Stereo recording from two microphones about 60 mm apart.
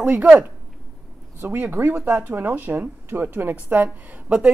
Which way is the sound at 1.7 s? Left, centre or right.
Right.